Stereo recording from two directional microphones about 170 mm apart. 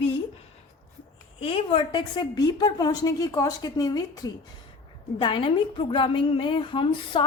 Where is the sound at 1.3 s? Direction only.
30° left (ahead or behind).